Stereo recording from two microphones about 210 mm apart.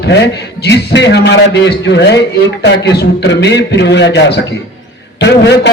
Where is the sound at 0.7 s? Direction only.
55° left (ahead or behind).